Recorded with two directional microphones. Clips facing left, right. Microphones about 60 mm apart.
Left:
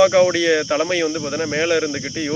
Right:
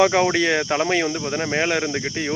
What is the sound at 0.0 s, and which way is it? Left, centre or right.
Speech, right.